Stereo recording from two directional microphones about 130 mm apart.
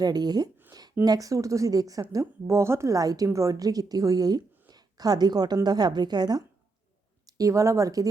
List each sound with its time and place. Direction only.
0.0 s a woman's voice: 30° right (ahead or behind)